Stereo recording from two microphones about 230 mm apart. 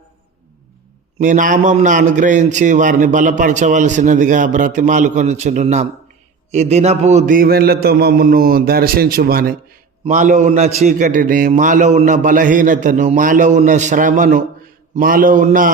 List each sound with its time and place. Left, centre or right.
1.2 s a man's voice: right